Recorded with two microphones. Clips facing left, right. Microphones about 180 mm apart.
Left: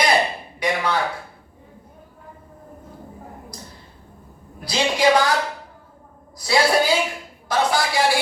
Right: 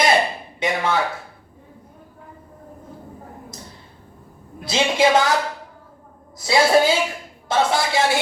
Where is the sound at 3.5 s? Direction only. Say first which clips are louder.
Even; 25° right (ahead or behind).